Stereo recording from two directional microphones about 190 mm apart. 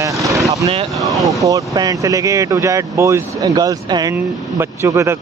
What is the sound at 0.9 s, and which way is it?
Speech, centre (ahead or behind).